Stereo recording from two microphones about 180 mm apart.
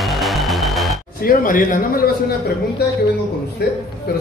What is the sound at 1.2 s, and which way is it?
Speech, 50° left (ahead or behind).